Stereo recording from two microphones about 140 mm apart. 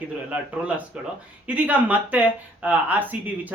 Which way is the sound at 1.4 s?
10° right (ahead or behind).